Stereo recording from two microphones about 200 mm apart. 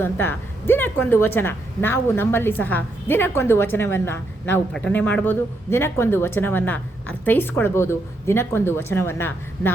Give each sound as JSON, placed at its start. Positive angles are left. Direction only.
{"t": 0.0, "sound": "a woman's voice", "side_deg": 10}